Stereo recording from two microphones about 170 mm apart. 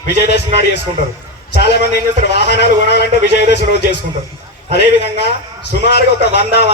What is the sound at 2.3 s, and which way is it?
Speech, 75° left (ahead or behind).